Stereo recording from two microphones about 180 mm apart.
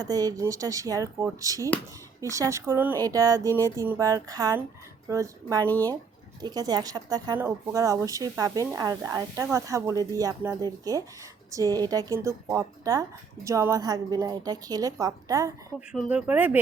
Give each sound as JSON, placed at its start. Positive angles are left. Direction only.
{"t": 0.0, "sound": "speech", "side_deg": -20}
{"t": 5.6, "sound": "speech", "side_deg": 10}
{"t": 6.4, "sound": "speech", "side_deg": -20}
{"t": 15.9, "sound": "speech", "side_deg": -5}